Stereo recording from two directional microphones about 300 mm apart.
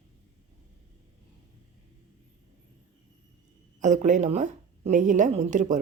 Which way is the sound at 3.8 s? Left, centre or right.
Right.